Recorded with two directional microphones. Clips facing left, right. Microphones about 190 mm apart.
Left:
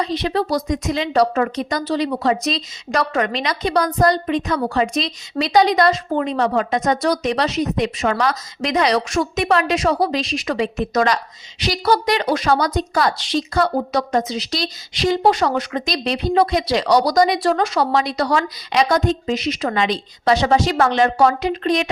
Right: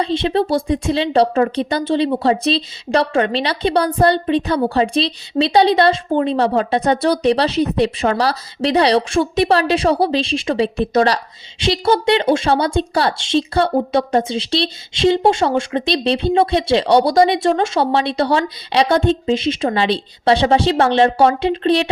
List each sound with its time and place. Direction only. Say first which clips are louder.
0.0 s a woman's voice: right 3 dB; 25° right (ahead or behind)